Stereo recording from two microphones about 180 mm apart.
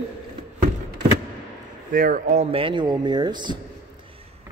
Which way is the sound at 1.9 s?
50° right (ahead or behind).